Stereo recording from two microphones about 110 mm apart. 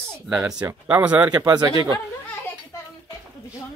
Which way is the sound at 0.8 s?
10° right (ahead or behind).